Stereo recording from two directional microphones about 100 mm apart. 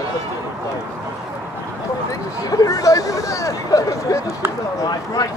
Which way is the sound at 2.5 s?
35° left (ahead or behind).